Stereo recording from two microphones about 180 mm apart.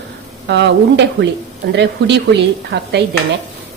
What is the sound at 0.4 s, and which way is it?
Speech, 75° right (ahead or behind).